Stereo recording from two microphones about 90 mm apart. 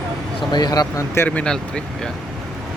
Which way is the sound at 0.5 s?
50° left (ahead or behind).